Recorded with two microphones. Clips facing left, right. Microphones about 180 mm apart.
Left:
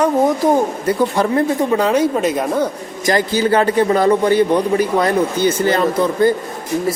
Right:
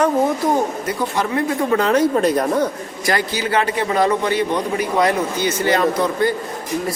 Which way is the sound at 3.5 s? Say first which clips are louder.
Left 4 dB; 35° left (ahead or behind).